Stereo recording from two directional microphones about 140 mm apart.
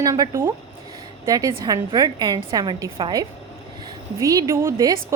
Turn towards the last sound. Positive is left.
turn(degrees=-25)  # may be behind; listen again after turning